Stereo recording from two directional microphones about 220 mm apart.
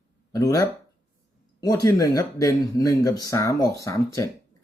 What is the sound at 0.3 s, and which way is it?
Speech, 15° left (ahead or behind).